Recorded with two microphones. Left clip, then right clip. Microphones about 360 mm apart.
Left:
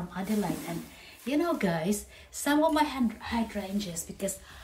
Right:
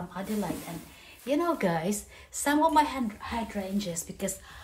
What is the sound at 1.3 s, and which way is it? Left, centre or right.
A woman's voice, centre.